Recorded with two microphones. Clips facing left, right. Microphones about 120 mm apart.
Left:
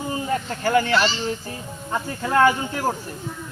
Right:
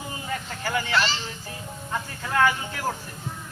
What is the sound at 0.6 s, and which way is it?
Speech, 50° left (ahead or behind).